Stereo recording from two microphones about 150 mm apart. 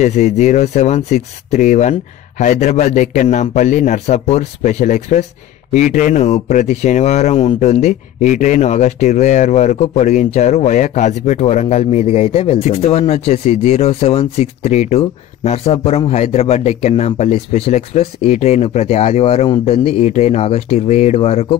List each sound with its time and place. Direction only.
0.0 s speech: 50° left (ahead or behind)